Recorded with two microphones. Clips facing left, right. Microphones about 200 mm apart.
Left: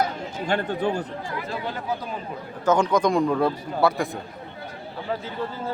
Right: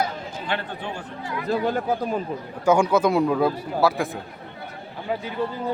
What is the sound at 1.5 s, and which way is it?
Speech, 50° right (ahead or behind).